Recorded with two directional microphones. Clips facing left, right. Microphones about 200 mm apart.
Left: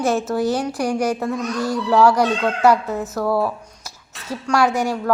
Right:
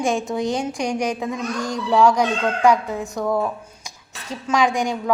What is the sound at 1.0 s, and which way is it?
Speech, 15° right (ahead or behind).